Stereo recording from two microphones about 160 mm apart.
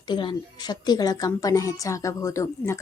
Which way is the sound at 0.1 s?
30° left (ahead or behind).